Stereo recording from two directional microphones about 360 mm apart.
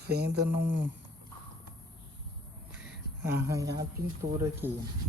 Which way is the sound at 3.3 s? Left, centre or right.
Centre.